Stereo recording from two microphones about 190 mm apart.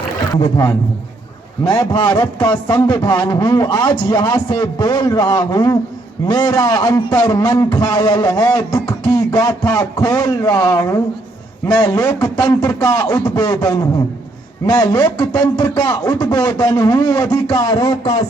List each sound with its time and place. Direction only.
0.3 s a man's voice: 20° left (ahead or behind)